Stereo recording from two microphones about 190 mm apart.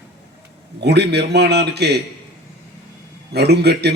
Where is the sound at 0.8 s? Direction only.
60° right (ahead or behind).